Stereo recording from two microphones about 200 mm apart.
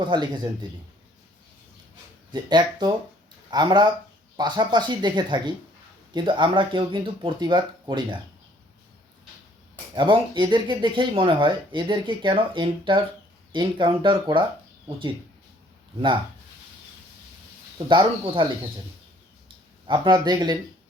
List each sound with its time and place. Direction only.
0.0 s speech: 20° right (ahead or behind)
2.3 s speech: 20° right (ahead or behind)
9.9 s speech: 25° right (ahead or behind)
17.8 s speech: 25° right (ahead or behind)
19.9 s speech: 20° right (ahead or behind)